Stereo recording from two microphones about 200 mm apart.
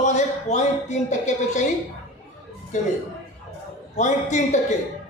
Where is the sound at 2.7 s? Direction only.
35° left (ahead or behind).